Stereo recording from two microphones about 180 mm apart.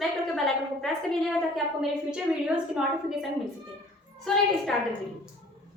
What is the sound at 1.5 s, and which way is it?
A woman's voice, 5° right (ahead or behind).